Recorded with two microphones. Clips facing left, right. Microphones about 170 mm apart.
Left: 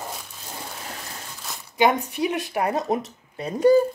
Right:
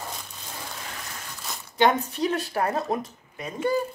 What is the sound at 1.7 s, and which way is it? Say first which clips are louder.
Speech: left 1 dB; 10° left (ahead or behind).